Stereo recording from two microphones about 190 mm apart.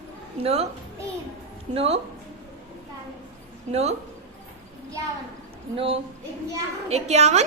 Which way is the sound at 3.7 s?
35° right (ahead or behind).